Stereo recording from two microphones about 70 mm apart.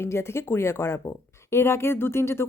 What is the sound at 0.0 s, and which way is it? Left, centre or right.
A woman's voice, left.